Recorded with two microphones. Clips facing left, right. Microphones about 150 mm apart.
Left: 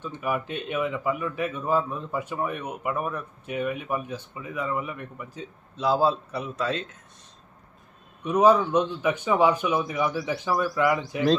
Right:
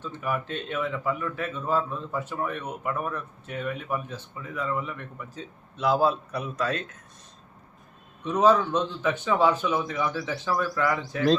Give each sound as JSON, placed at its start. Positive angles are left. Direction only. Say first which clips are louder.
{"t": 0.0, "sound": "speech", "louder": "left 2 dB", "side_deg": 15}
{"t": 5.7, "sound": "a man's voice", "louder": "even", "side_deg": 35}
{"t": 8.2, "sound": "speech", "louder": "left 2 dB", "side_deg": 10}